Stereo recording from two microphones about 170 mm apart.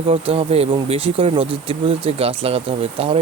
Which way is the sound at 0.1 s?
35° right (ahead or behind).